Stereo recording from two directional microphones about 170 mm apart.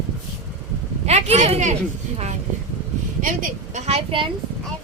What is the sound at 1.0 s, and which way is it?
Speech, 40° right (ahead or behind).